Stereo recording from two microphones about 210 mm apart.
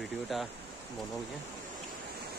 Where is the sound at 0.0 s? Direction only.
Centre (ahead or behind).